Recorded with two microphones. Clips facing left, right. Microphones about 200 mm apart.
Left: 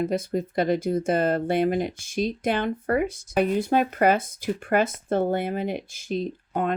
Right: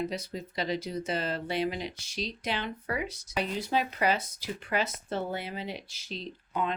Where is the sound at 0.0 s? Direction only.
50° left (ahead or behind).